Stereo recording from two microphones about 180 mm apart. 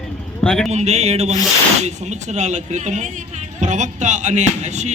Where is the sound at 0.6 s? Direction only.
35° right (ahead or behind).